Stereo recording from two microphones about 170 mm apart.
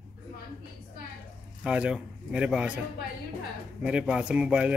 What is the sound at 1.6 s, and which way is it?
A man's voice, 5° right (ahead or behind).